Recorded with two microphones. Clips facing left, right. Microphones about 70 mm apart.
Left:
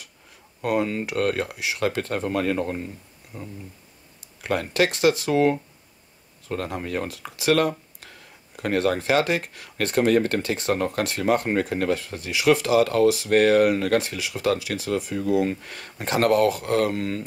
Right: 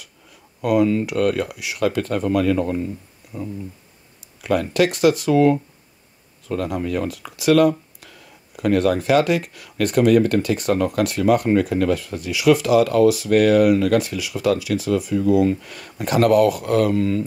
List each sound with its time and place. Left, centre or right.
0.6 s speech: left
4.4 s speech: left